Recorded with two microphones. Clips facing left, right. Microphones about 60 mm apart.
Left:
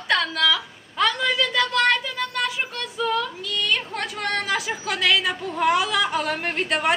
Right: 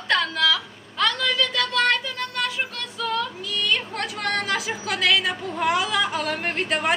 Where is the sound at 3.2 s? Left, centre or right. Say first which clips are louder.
Even; centre.